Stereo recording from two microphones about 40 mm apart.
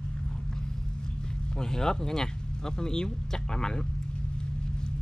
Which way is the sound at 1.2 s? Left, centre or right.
Centre.